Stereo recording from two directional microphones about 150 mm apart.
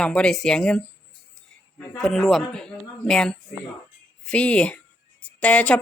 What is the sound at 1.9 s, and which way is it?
A woman's voice, centre (ahead or behind).